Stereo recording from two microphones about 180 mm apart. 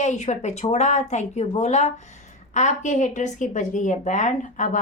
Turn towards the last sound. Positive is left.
turn(degrees=45)  # may be behind; listen again after turning